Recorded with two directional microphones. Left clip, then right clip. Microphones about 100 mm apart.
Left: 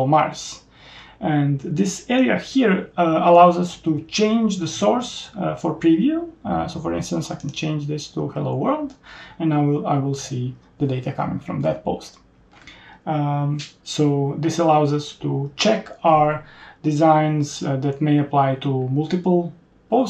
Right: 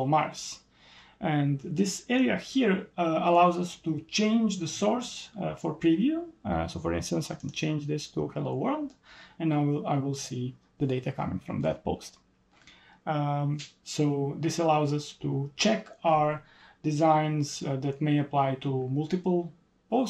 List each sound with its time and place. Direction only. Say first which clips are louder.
0.0 s speech: left 9 dB; 10° right (ahead or behind)
7.8 s speech: left 5 dB; 90° left
8.2 s speech: left 8 dB; 10° right (ahead or behind)